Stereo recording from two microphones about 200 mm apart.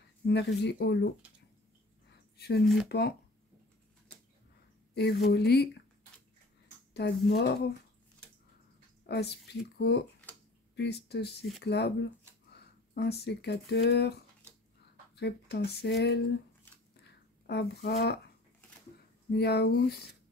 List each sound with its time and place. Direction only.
0.3 s speech: 55° left (ahead or behind)
2.3 s speech: 55° left (ahead or behind)
2.6 s speech: centre (ahead or behind)
4.9 s speech: 55° left (ahead or behind)
6.9 s speech: 60° left (ahead or behind)
9.0 s speech: 55° left (ahead or behind)
17.0 s a sound: 55° left (ahead or behind)
19.3 s speech: 55° left (ahead or behind)